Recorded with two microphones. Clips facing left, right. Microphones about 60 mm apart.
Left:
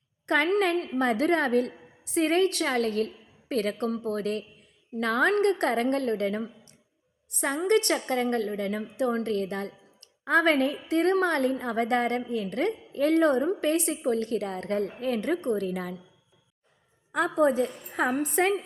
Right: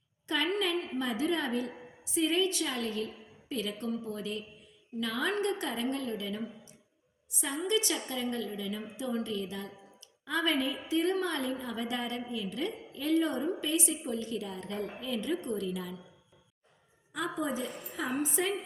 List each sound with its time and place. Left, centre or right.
0.3 s a woman's voice: left
17.1 s a woman's voice: left